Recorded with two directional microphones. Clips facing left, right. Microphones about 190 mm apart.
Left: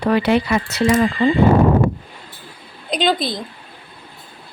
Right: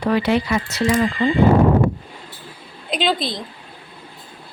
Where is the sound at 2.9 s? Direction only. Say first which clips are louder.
Left 2 dB; centre (ahead or behind).